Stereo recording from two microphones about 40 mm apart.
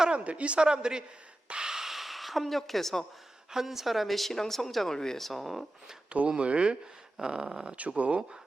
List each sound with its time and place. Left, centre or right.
0.3 s speech: right
1.5 s a sound: centre
3.5 s speech: centre
5.2 s speech: centre
6.1 s speech: right
7.2 s a sound: centre
7.7 s speech: right